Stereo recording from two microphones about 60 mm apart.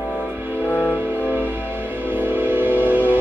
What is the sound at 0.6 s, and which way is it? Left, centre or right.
Music, left.